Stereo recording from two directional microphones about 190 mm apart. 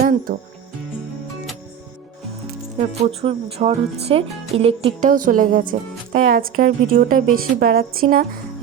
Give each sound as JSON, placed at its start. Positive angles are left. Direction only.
{"t": 0.0, "sound": "speech", "side_deg": -50}
{"t": 2.7, "sound": "speech", "side_deg": -35}
{"t": 5.0, "sound": "a woman's voice", "side_deg": -45}